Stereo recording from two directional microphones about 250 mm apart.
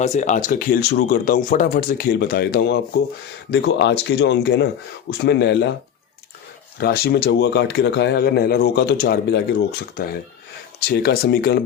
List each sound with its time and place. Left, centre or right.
0.0 s speech: left
6.7 s speech: left